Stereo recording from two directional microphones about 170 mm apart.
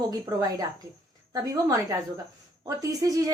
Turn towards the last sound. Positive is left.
turn(degrees=-20)  # may be behind; listen again after turning